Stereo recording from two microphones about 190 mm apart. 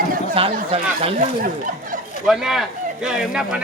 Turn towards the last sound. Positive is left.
turn(degrees=-5)  # may be behind; listen again after turning